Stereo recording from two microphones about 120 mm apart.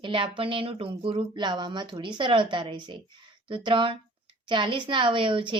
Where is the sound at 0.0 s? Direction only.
45° right (ahead or behind).